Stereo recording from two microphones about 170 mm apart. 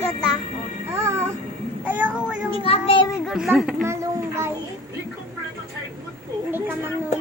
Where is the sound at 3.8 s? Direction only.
15° right (ahead or behind).